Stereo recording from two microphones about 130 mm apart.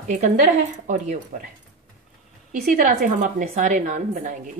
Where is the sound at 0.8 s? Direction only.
65° right (ahead or behind).